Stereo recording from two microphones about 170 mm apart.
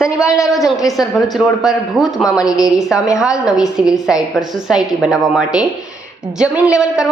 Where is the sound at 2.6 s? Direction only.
5° right (ahead or behind).